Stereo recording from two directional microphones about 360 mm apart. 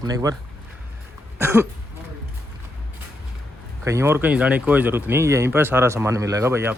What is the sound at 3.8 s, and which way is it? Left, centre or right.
Speech, centre.